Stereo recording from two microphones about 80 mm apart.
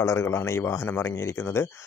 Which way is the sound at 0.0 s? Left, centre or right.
Left.